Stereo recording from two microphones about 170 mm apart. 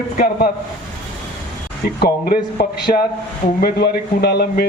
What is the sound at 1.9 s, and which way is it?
A man's voice, 65° left (ahead or behind).